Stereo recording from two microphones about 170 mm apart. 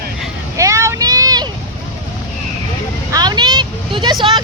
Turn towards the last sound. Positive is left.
turn(degrees=-25)  # may be behind; listen again after turning